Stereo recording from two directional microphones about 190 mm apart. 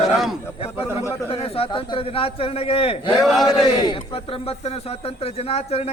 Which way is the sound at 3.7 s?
25° left (ahead or behind).